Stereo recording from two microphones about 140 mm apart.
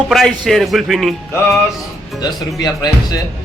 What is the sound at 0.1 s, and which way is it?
Speech, centre (ahead or behind).